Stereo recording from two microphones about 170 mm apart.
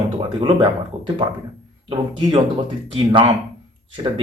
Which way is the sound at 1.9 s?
25° right (ahead or behind).